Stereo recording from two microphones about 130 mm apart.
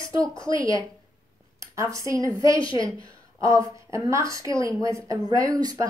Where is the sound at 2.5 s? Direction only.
40° left (ahead or behind).